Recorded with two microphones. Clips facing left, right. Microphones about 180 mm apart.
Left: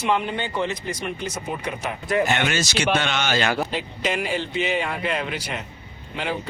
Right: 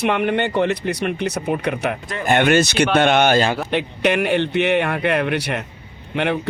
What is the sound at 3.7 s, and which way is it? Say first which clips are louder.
A man's voice: right 7 dB; 65° right (ahead or behind).